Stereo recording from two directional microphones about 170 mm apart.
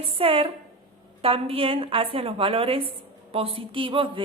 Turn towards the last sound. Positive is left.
turn(degrees=-30)  # may be behind; listen again after turning